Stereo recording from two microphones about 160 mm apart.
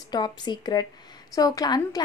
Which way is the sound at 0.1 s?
25° left (ahead or behind).